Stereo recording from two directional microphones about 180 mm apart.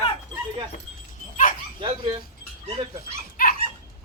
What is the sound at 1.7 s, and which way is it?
Speech, 25° right (ahead or behind).